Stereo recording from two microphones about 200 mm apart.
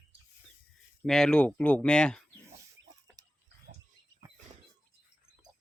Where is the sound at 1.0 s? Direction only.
5° left (ahead or behind).